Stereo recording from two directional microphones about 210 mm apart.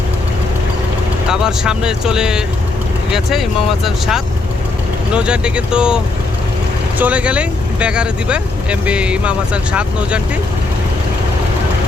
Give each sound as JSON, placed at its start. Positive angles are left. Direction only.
{"t": 1.3, "sound": "speech", "side_deg": -5}
{"t": 7.0, "sound": "speech", "side_deg": -5}